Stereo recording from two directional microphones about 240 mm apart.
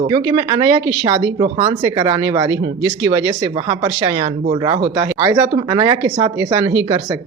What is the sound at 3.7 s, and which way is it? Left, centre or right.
Speech, centre.